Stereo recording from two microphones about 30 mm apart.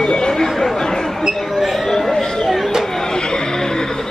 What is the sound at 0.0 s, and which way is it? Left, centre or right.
Chatter, left.